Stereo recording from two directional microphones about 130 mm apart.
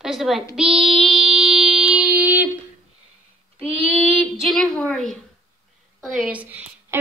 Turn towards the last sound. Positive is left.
turn(degrees=-20)  # may be behind; listen again after turning